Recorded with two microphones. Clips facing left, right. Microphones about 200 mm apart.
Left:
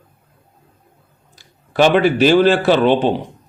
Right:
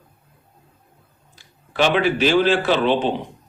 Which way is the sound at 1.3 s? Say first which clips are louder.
Left 6 dB; 45° left (ahead or behind).